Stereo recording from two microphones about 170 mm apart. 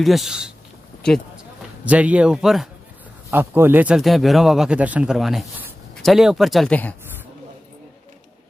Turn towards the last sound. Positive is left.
turn(degrees=10)  # may be behind; listen again after turning